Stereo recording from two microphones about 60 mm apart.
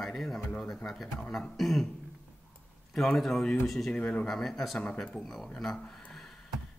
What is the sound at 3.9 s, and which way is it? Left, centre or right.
Speech, left.